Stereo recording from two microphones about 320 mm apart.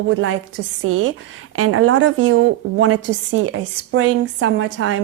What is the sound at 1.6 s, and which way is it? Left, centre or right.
Speech, right.